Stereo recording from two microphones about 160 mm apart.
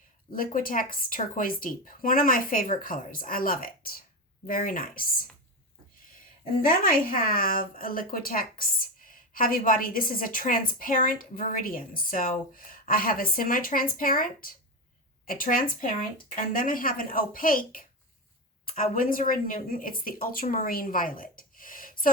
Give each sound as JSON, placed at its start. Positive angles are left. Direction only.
{"t": 0.3, "sound": "a woman's voice", "side_deg": 60}
{"t": 6.6, "sound": "a woman's voice", "side_deg": 60}